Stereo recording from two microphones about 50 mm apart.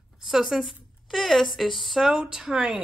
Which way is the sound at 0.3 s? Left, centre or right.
Centre.